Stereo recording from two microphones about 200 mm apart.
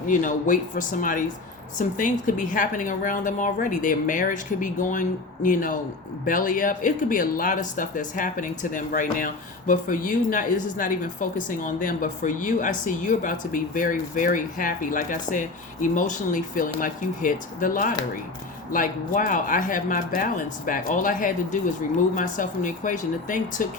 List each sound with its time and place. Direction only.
0.1 s speech: 40° left (ahead or behind)